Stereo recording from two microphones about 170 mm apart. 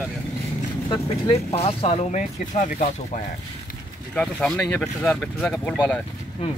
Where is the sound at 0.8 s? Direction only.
25° left (ahead or behind); by 3.2 s 45° left (ahead or behind).